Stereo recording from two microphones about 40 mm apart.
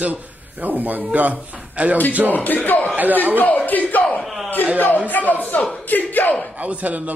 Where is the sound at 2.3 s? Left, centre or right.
Left.